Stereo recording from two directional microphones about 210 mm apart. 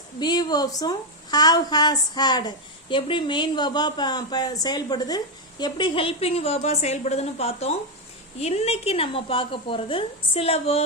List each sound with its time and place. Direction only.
0.2 s a woman's voice: 20° left (ahead or behind)